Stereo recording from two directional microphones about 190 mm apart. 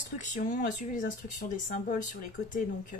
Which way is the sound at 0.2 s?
40° left (ahead or behind).